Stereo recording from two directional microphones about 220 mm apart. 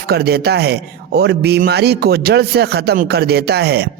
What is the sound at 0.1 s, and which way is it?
Speech, 45° right (ahead or behind).